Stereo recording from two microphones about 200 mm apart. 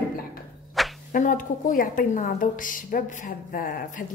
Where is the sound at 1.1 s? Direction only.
40° left (ahead or behind).